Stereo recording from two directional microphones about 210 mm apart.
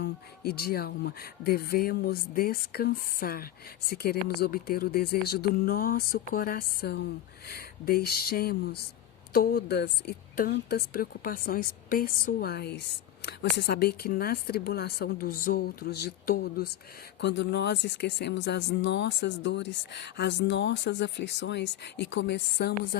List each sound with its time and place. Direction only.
0.0 s speech: 50° left (ahead or behind)